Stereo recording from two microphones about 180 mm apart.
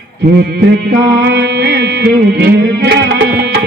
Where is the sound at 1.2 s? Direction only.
65° right (ahead or behind).